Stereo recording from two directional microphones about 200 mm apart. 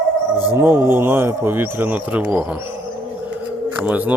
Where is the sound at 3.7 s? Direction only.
5° right (ahead or behind).